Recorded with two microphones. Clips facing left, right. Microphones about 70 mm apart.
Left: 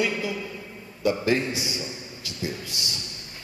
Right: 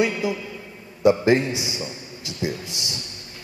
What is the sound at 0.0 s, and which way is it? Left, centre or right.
A man's voice, right.